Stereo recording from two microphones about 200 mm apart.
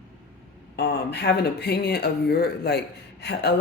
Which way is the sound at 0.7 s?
55° left (ahead or behind).